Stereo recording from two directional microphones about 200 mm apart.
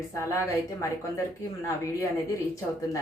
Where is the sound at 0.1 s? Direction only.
15° left (ahead or behind).